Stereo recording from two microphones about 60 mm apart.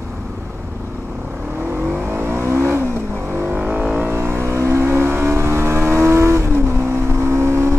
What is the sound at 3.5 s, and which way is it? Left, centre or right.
Vehicle, right.